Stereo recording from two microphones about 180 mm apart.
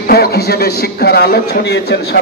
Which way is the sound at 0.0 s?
60° left (ahead or behind).